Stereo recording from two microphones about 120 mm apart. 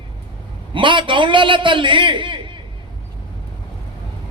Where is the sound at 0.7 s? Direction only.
45° right (ahead or behind).